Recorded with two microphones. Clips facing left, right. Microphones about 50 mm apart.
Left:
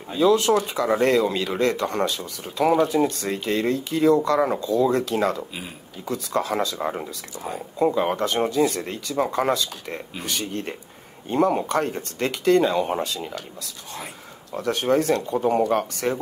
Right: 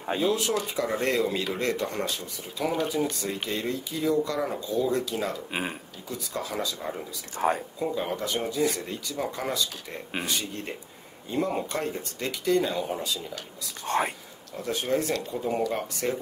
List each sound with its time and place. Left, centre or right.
0.2 s speech: left
2.6 s speech: left
7.3 s speech: right
7.9 s speech: left
13.8 s speech: right
14.5 s speech: left